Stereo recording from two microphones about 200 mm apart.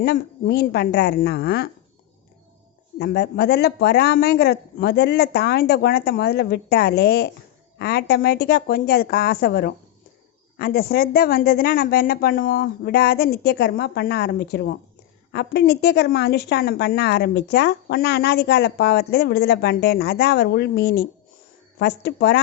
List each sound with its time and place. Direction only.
0.0 s speech: 50° left (ahead or behind)
3.0 s a woman's voice: 55° left (ahead or behind)